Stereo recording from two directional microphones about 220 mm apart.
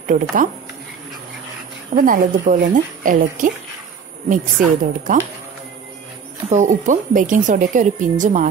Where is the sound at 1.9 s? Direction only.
35° right (ahead or behind).